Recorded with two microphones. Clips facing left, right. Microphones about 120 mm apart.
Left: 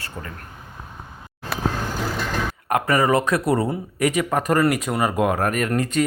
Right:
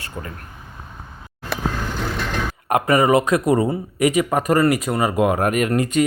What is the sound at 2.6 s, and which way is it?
Speech, 20° right (ahead or behind).